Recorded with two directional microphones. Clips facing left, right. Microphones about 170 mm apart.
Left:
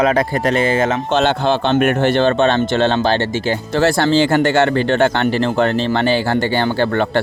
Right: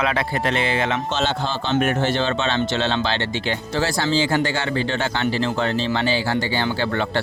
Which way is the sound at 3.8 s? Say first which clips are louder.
Left 7 dB; 60° left (ahead or behind).